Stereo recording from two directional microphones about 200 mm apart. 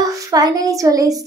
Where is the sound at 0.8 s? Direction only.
15° right (ahead or behind).